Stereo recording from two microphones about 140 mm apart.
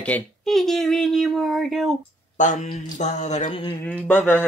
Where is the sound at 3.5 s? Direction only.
35° left (ahead or behind).